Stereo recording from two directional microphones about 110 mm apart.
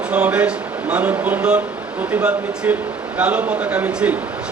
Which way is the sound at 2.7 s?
15° right (ahead or behind).